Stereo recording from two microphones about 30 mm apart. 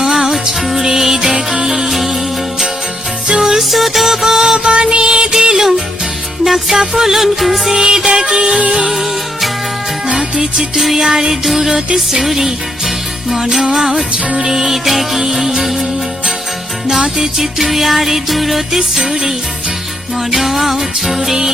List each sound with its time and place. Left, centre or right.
0.0 s music: centre
3.2 s music: right
3.7 s music: centre
4.5 s music: right
5.3 s music: centre
7.7 s music: right
8.9 s music: centre
10.9 s music: centre
14.7 s music: centre
17.2 s music: centre
20.3 s music: centre